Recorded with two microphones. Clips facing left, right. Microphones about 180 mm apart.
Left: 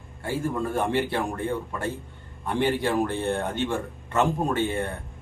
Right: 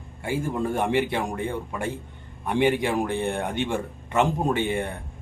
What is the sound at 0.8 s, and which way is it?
Speech, 15° right (ahead or behind).